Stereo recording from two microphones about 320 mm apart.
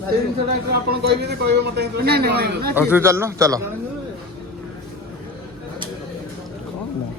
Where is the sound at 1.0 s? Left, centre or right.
Right.